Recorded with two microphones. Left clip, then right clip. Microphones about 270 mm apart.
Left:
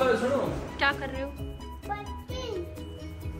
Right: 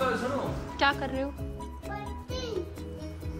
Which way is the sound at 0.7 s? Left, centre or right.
Centre.